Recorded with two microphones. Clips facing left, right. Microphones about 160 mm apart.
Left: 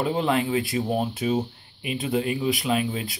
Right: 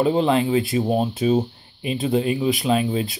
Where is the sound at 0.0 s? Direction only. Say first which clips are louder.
Right 5 dB; 25° right (ahead or behind).